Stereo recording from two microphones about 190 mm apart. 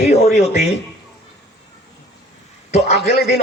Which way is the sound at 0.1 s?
45° left (ahead or behind).